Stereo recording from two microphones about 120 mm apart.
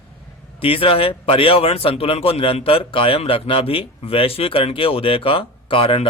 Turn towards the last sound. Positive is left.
turn(degrees=50)  # may be behind; listen again after turning